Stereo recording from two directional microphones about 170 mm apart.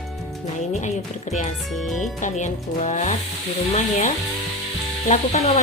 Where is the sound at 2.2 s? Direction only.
45° left (ahead or behind).